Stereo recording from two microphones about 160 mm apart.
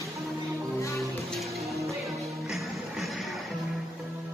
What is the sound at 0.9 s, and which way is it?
Music, centre (ahead or behind).